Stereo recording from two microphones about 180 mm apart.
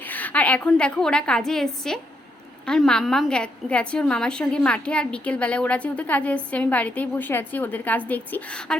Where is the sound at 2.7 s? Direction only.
5° left (ahead or behind).